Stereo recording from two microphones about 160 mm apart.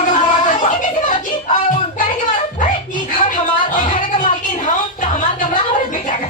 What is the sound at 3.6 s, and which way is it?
Music, 55° left (ahead or behind).